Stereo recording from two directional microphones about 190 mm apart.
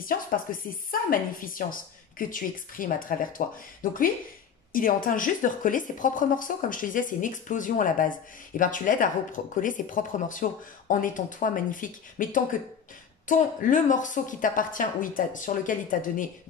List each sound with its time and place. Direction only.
0.5 s speech: 45° left (ahead or behind)